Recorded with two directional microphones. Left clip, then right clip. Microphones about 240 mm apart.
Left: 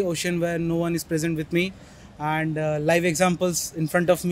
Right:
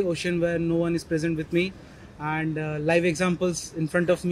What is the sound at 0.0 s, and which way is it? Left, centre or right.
Speech, left.